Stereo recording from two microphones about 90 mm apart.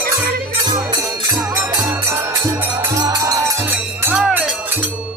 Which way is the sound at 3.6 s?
20° right (ahead or behind).